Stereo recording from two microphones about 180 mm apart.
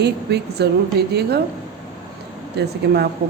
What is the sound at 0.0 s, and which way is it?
Speech, 65° right (ahead or behind).